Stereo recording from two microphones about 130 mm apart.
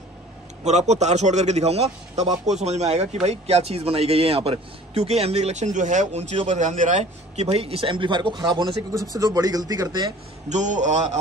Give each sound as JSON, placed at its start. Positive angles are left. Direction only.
{"t": 0.7, "sound": "a man's voice", "side_deg": -60}
{"t": 10.5, "sound": "a man's voice", "side_deg": -70}